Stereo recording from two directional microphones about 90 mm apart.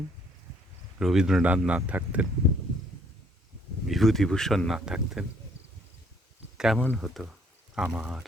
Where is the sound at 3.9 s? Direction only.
Centre (ahead or behind).